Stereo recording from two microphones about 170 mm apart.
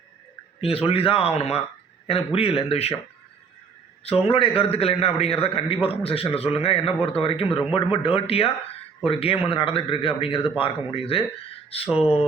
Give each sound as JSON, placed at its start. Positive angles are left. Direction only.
{"t": 0.6, "sound": "a man's voice", "side_deg": 35}
{"t": 4.0, "sound": "a man's voice", "side_deg": 35}